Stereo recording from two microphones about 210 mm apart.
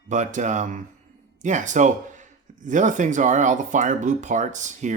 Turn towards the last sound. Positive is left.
turn(degrees=-35)  # may be behind; listen again after turning